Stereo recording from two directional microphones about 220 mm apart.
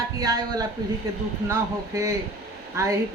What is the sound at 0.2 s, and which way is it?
Speech, 15° right (ahead or behind).